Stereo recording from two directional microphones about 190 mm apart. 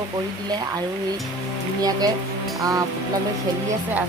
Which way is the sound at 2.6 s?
20° right (ahead or behind).